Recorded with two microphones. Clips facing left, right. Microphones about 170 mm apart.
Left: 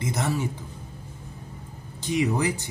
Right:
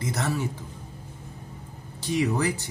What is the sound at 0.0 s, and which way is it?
Speech, 20° left (ahead or behind).